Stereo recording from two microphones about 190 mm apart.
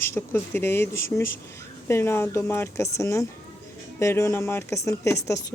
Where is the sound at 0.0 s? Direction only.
10° left (ahead or behind).